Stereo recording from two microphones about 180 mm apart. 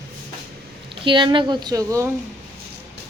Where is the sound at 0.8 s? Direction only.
25° right (ahead or behind).